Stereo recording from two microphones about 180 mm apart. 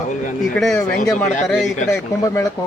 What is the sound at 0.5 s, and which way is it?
Speech, centre (ahead or behind).